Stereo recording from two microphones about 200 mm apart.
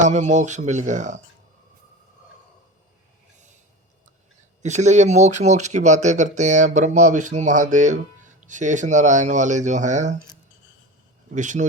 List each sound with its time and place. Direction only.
0.0 s speech: 35° right (ahead or behind)
4.6 s speech: 35° right (ahead or behind)
11.3 s speech: 40° right (ahead or behind)